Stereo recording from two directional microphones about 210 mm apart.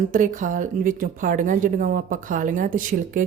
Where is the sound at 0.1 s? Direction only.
40° right (ahead or behind).